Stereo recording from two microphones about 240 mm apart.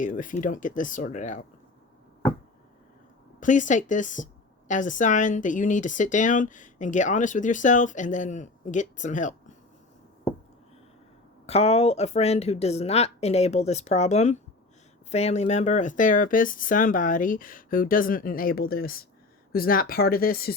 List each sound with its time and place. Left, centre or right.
0.0 s speech: left
3.4 s speech: left
11.4 s speech: left